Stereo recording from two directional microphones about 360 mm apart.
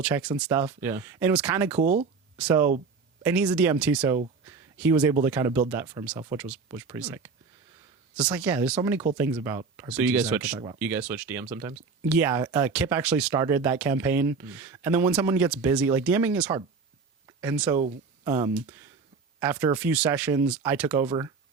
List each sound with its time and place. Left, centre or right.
0.0 s speech: centre
1.8 s speech: right
2.4 s speech: centre
4.4 s a sound: centre
5.2 s speech: centre
17.2 s a sound: centre
18.3 s speech: centre